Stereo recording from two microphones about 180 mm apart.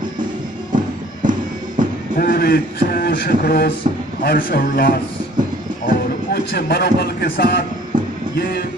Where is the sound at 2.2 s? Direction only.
55° left (ahead or behind).